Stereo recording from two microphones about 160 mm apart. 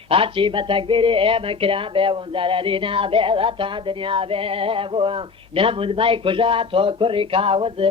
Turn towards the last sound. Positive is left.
turn(degrees=-35)  # may be behind; listen again after turning